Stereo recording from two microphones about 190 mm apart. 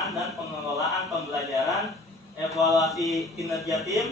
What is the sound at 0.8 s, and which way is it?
Speech, centre (ahead or behind).